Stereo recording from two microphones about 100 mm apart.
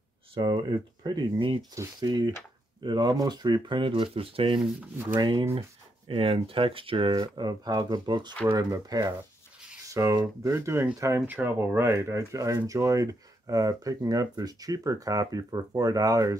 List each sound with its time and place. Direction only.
0.3 s speech: 55° right (ahead or behind)
5.1 s speech: 50° right (ahead or behind)
6.0 s speech: 65° right (ahead or behind)
7.2 s speech: 40° right (ahead or behind)
11.2 s speech: 20° right (ahead or behind); by 16.3 s 35° right (ahead or behind)